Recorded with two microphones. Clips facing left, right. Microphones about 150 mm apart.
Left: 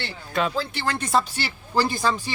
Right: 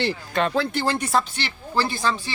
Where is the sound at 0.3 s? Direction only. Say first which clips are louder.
Right 1 dB; centre (ahead or behind).